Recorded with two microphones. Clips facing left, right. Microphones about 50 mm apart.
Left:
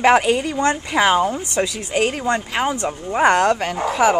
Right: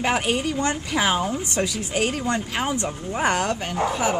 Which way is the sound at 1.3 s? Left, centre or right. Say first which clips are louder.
Left 4 dB; left.